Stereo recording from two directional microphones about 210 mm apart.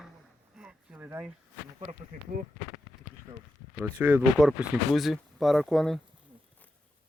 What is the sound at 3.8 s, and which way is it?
Speech, 5° right (ahead or behind).